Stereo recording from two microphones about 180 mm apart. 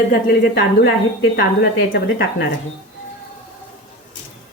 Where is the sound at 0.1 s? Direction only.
55° left (ahead or behind).